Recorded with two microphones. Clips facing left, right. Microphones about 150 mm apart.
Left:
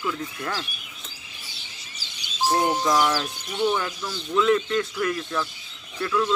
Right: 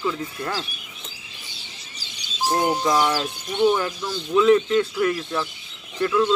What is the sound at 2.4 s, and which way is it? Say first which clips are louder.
Music: even; 5° left (ahead or behind).